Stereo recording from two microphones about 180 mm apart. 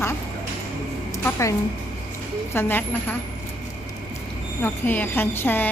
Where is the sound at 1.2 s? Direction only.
15° left (ahead or behind).